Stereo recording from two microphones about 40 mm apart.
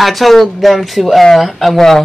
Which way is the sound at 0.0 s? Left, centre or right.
Centre.